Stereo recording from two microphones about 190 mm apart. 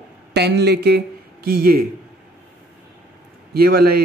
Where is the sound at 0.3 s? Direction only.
60° right (ahead or behind).